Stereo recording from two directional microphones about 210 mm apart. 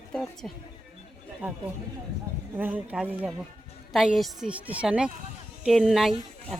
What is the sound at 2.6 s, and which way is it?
Speech, 10° right (ahead or behind).